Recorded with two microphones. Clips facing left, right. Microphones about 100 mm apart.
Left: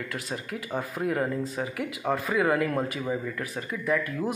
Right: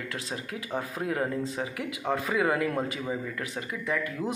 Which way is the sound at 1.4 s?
25° right (ahead or behind).